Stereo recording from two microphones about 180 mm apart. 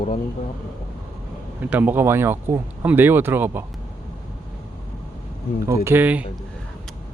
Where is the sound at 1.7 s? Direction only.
10° right (ahead or behind).